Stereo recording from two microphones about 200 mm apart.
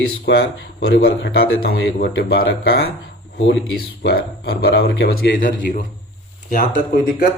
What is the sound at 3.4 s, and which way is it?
A man's voice, 65° left (ahead or behind).